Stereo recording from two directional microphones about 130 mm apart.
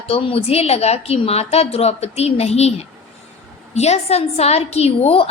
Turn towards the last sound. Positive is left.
turn(degrees=50)  # may be behind; listen again after turning